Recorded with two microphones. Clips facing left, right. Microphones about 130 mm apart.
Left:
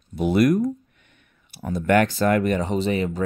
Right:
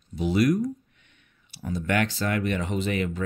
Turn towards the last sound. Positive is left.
turn(degrees=30)  # may be behind; listen again after turning